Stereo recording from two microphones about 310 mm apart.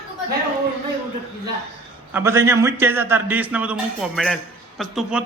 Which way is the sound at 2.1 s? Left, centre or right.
Centre.